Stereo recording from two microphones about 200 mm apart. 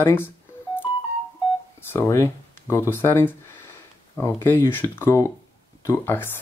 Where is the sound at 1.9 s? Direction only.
15° left (ahead or behind).